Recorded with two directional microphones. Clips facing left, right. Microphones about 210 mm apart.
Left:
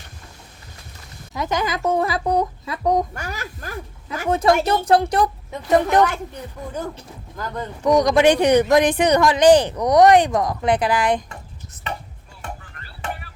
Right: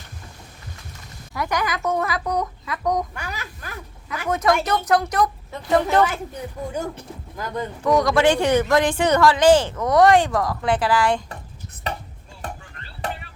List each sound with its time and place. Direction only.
1.3 s speech: 20° left (ahead or behind)
3.2 s speech: 45° left (ahead or behind)
5.5 s speech: 20° left (ahead or behind)
7.9 s speech: 20° left (ahead or behind)
11.9 s chopping: 35° right (ahead or behind)
13.0 s music: 35° right (ahead or behind)